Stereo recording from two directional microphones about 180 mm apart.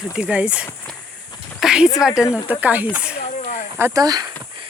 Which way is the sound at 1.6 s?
5° right (ahead or behind).